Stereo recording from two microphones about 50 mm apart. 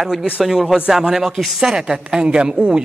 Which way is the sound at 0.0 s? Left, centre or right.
Centre.